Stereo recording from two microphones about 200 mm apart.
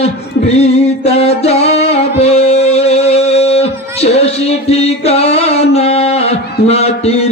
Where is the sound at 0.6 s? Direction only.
30° left (ahead or behind).